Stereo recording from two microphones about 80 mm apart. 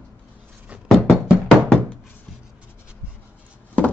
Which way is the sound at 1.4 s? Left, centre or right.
Centre.